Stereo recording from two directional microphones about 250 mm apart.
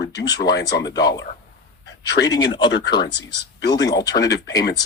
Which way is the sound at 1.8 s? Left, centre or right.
Left.